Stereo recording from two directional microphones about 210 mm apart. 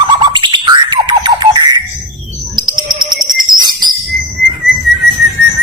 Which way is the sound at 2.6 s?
20° right (ahead or behind).